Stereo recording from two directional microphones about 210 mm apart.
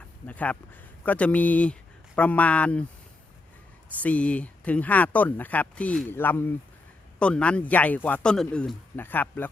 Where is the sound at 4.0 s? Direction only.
5° left (ahead or behind).